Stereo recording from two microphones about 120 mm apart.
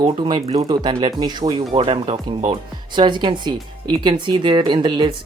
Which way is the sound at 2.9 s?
40° right (ahead or behind).